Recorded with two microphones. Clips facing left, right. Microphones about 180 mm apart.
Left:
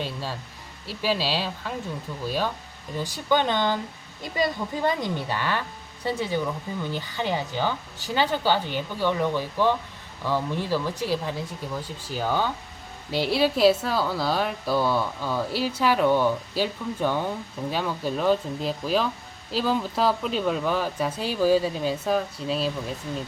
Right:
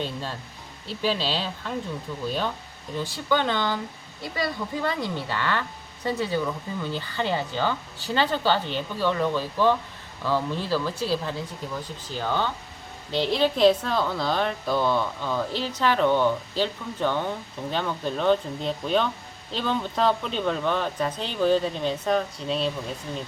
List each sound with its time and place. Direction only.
0.0 s music: 5° left (ahead or behind)
1.0 s speech: 10° left (ahead or behind)
3.0 s a woman's voice: 15° left (ahead or behind)